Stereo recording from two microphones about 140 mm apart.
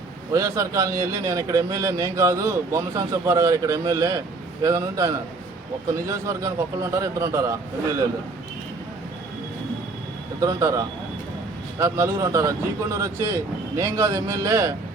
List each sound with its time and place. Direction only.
0.3 s a man's voice: 20° right (ahead or behind)
10.4 s a man's voice: 25° right (ahead or behind)